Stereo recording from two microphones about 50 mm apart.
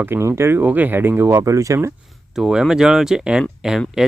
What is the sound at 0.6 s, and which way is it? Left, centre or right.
Speech, right.